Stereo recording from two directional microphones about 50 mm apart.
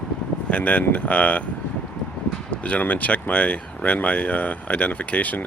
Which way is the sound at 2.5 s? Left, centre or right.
Left.